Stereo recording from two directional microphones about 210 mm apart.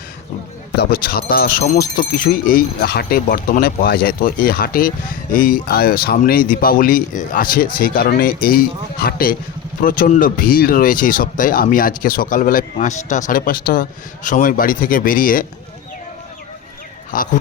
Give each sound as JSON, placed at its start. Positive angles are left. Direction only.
{"t": 0.8, "sound": "speech", "side_deg": 45}
{"t": 17.1, "sound": "speech", "side_deg": 40}